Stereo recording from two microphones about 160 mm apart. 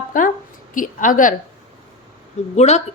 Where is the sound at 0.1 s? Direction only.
55° left (ahead or behind).